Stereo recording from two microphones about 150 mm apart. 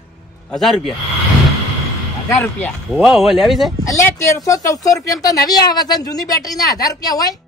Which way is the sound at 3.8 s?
20° left (ahead or behind).